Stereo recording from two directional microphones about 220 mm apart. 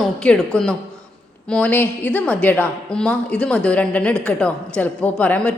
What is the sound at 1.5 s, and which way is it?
A woman's voice, 5° left (ahead or behind).